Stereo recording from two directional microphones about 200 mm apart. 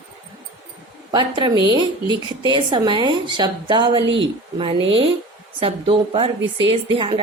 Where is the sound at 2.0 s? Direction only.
25° left (ahead or behind).